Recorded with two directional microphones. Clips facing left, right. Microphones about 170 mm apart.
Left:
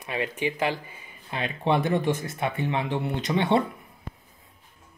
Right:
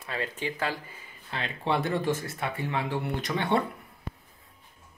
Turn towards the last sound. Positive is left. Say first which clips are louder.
# left 4 dB
turn(degrees=20)  # may be behind; listen again after turning